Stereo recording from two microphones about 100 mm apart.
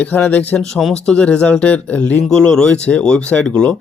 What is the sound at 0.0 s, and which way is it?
Speech, 15° left (ahead or behind).